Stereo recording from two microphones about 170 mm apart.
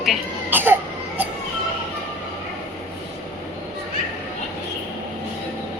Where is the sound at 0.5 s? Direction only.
10° right (ahead or behind).